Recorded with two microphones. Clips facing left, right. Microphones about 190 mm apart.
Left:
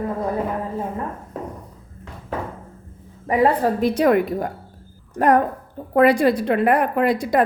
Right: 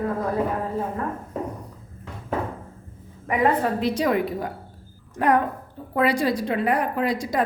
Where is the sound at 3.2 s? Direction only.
30° left (ahead or behind).